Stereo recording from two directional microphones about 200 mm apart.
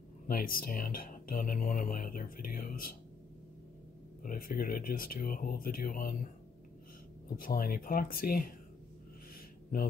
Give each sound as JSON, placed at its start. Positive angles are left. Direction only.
{"t": 0.3, "sound": "speech", "side_deg": 45}
{"t": 4.2, "sound": "speech", "side_deg": 45}
{"t": 7.3, "sound": "speech", "side_deg": 45}